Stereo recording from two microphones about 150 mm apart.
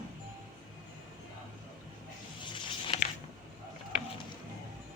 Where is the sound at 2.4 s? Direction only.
35° left (ahead or behind).